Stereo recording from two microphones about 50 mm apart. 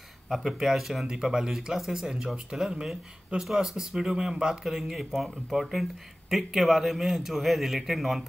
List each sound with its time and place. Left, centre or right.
0.3 s a man's voice: centre